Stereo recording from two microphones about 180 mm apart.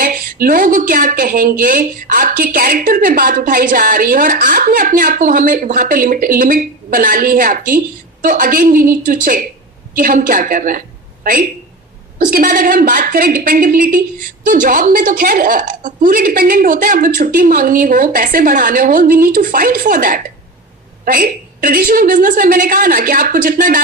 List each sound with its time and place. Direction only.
0.0 s a woman's voice: 50° right (ahead or behind)